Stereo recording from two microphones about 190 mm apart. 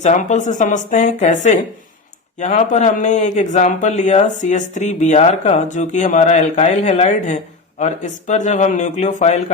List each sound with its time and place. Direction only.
0.0 s speech: 40° left (ahead or behind)